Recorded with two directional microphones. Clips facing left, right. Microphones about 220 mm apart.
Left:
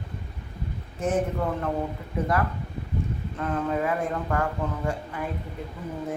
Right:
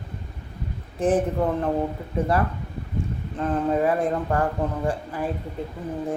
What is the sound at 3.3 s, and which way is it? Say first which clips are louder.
A man's voice: right 5 dB; 30° right (ahead or behind).